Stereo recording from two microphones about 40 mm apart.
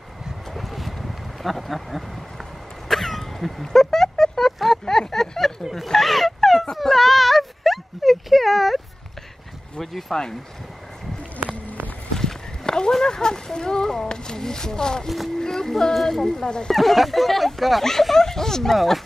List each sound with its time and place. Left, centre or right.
0.5 s a sound: centre
2.9 s cough: centre
3.7 s a sound: centre
5.6 s speech: centre
5.9 s a sound: centre
9.8 s speech: centre
12.2 s walk: centre
13.0 s speech: centre
15.0 s speech: centre
16.4 s speech: centre
16.7 s speech: centre
18.8 s speech: centre